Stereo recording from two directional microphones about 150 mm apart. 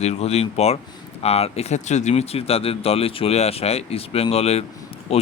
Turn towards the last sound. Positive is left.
turn(degrees=45)  # may be behind; listen again after turning